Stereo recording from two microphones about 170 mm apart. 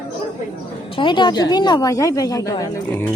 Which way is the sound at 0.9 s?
25° left (ahead or behind).